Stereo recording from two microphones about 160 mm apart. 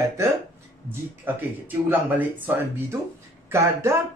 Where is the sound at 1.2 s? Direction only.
10° right (ahead or behind).